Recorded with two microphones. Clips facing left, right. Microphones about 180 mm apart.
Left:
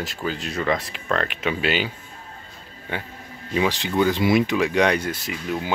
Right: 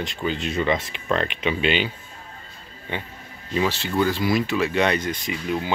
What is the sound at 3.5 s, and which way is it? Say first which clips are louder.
Speech: left 1 dB; 15° left (ahead or behind).